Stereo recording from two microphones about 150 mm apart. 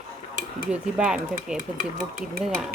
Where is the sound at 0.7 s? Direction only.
5° right (ahead or behind).